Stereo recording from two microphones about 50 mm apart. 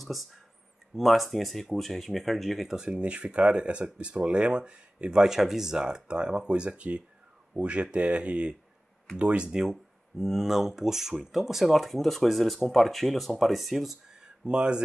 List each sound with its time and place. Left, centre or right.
0.0 s speech: centre
2.7 s speech: centre
14.2 s speech: centre